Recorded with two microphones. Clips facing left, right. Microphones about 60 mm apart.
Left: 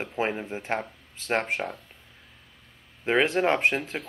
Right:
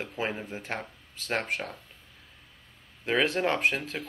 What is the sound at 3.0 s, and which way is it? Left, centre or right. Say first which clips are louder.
Speech: left 3 dB; left.